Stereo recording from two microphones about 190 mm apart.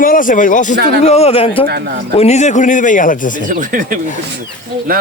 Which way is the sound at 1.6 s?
55° right (ahead or behind).